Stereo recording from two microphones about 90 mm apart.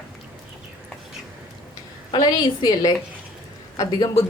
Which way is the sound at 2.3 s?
50° left (ahead or behind).